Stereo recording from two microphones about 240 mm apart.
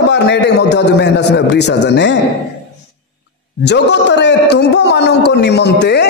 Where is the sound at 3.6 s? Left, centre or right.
Left.